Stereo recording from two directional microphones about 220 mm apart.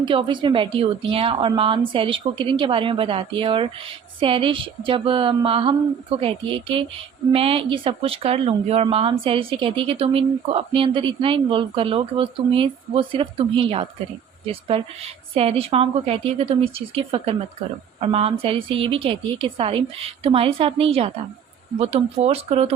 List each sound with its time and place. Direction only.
0.0 s speech: 20° right (ahead or behind)